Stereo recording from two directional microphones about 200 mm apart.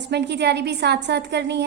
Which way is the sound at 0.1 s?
60° right (ahead or behind).